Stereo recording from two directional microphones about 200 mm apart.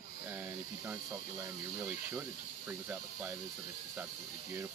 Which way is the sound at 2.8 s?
15° right (ahead or behind).